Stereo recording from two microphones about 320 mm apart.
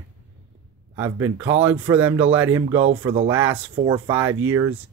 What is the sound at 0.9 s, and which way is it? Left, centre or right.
Speech, centre.